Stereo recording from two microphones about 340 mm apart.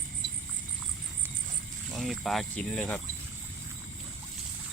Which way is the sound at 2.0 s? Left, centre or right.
Centre.